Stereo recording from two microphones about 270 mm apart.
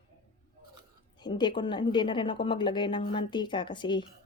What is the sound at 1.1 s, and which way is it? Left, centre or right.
A woman's voice, centre.